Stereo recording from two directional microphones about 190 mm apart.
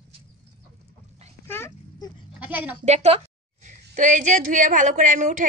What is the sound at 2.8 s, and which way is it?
A woman's voice, 35° right (ahead or behind).